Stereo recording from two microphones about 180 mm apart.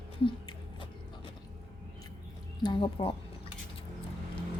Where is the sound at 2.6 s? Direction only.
25° left (ahead or behind).